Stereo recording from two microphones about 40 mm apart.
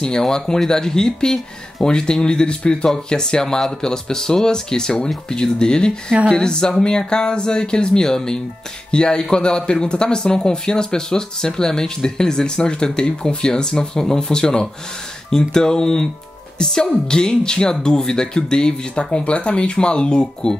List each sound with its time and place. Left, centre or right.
0.0 s speech: centre